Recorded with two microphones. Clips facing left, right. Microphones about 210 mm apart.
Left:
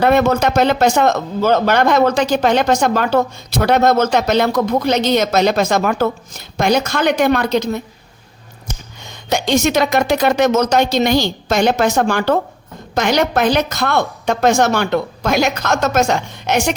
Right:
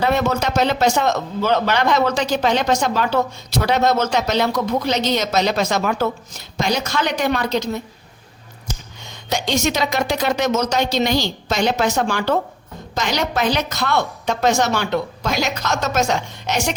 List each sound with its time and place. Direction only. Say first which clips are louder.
0.0 s speech: left 6 dB; 55° left (ahead or behind)
9.3 s speech: left 5 dB; 55° left (ahead or behind)